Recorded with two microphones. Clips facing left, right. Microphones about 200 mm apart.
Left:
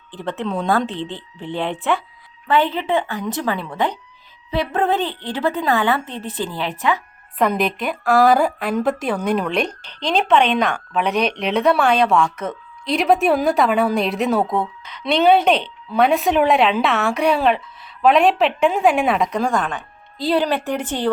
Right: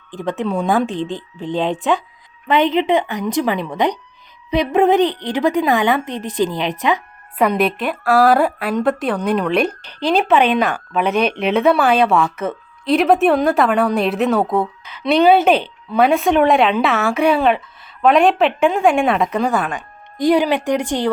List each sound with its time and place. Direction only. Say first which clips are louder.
0.2 s a woman's voice: right 3 dB; 15° right (ahead or behind)